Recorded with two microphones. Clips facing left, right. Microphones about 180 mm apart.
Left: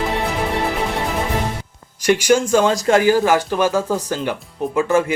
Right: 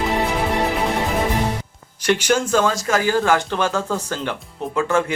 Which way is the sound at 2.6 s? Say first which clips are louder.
Left 5 dB; 30° left (ahead or behind).